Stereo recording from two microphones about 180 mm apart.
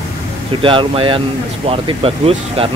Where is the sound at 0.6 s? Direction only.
30° right (ahead or behind).